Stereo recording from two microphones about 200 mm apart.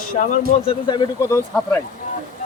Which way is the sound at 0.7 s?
25° left (ahead or behind).